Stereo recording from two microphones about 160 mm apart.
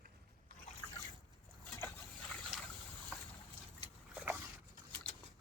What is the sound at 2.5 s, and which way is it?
Boat, 5° right (ahead or behind).